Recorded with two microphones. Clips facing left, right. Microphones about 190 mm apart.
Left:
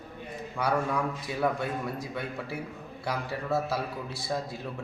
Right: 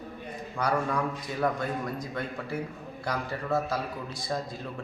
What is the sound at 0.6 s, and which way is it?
Speech, 5° left (ahead or behind).